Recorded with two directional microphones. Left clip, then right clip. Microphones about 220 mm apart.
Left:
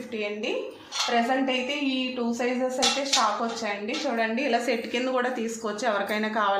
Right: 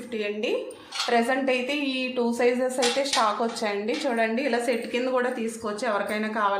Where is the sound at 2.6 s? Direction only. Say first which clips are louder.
Right 1 dB; 30° right (ahead or behind).